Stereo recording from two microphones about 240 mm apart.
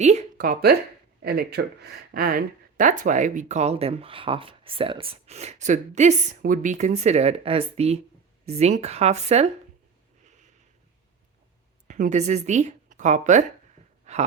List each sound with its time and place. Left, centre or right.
0.0 s speech: right
11.9 s speech: right
14.0 s a sound: right